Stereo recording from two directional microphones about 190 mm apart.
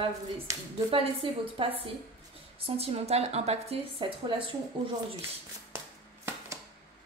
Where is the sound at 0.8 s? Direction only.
30° right (ahead or behind).